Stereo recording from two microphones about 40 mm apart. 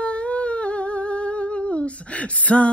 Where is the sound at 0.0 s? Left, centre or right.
Left.